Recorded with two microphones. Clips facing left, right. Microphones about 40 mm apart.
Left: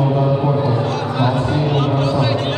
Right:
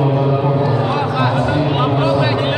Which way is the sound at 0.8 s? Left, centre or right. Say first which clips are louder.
Right 2 dB; centre.